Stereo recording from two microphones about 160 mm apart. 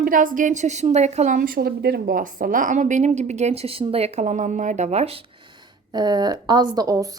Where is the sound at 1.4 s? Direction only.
65° right (ahead or behind); by 5.2 s 40° right (ahead or behind).